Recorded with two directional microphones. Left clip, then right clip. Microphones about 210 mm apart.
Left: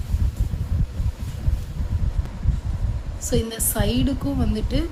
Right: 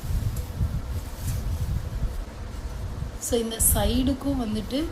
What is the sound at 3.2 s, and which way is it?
A woman's voice, 30° left (ahead or behind).